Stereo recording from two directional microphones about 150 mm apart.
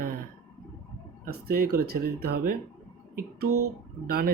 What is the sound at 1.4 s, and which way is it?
Speech, 90° right.